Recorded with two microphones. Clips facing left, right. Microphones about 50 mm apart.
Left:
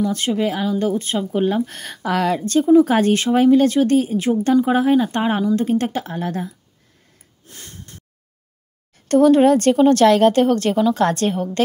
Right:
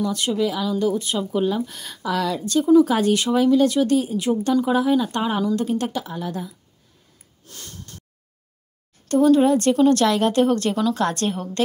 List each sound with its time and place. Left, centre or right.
0.0 s speech: left
7.4 s snort: left
9.1 s speech: left
10.7 s a woman's voice: centre
11.0 s speech: left